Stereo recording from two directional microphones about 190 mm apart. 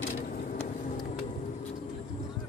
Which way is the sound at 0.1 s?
45° left (ahead or behind).